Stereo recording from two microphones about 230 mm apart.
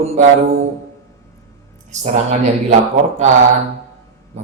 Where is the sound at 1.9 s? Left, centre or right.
Right.